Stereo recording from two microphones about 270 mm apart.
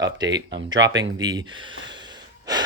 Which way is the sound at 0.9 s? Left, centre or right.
Centre.